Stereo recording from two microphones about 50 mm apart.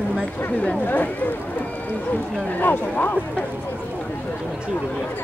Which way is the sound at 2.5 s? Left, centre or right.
Left.